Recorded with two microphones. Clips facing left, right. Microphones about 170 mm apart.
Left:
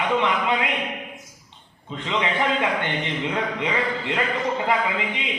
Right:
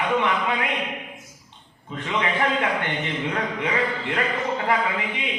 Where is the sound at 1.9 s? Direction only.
20° left (ahead or behind).